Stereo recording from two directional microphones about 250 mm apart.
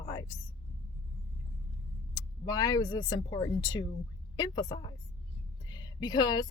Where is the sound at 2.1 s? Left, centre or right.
Centre.